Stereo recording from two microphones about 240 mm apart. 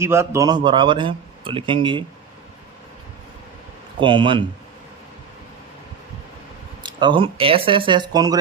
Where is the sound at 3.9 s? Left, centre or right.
Right.